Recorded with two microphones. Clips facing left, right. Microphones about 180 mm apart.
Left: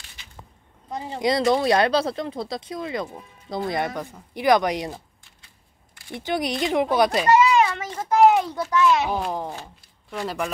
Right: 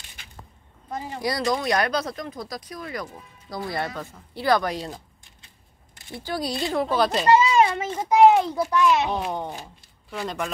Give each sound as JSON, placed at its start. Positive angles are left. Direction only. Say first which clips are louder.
{"t": 0.2, "sound": "a sound", "louder": "right 2 dB", "side_deg": -50}
{"t": 0.9, "sound": "speech", "louder": "left 5 dB", "side_deg": 25}
{"t": 6.1, "sound": "speech", "louder": "left 3 dB", "side_deg": 20}
{"t": 7.2, "sound": "a sound", "louder": "right 2 dB", "side_deg": -30}
{"t": 8.2, "sound": "a child's voice", "louder": "right 1 dB", "side_deg": -5}
{"t": 8.9, "sound": "a child's voice", "louder": "left 1 dB", "side_deg": 0}